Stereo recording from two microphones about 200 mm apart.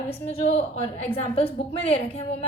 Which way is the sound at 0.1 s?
30° left (ahead or behind).